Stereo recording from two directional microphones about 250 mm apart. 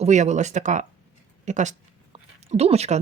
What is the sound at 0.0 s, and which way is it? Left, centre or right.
Speech, right.